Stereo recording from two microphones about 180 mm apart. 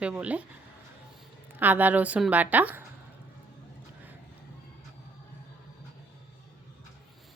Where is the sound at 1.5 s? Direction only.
10° right (ahead or behind).